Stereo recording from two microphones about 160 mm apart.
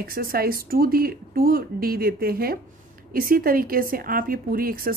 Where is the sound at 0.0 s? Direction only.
65° right (ahead or behind).